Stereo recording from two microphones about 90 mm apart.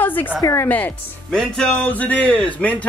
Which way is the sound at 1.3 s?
5° left (ahead or behind).